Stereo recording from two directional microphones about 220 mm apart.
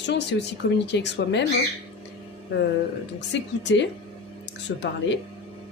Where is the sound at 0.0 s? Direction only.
50° left (ahead or behind).